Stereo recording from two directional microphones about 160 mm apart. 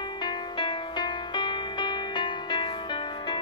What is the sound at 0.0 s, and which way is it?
Music, 30° left (ahead or behind).